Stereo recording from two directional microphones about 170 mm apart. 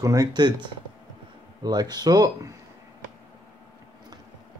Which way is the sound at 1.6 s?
25° right (ahead or behind).